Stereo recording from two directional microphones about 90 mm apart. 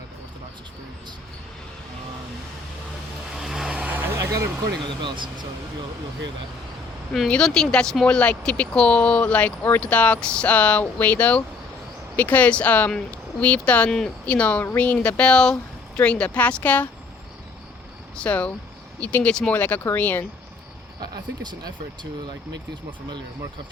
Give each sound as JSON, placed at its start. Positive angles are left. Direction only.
{"t": 3.4, "sound": "vehicle", "side_deg": -5}
{"t": 4.9, "sound": "speech", "side_deg": -60}
{"t": 7.3, "sound": "speech", "side_deg": 10}
{"t": 18.2, "sound": "speech", "side_deg": 15}
{"t": 21.0, "sound": "speech", "side_deg": -45}
{"t": 22.9, "sound": "speech", "side_deg": -55}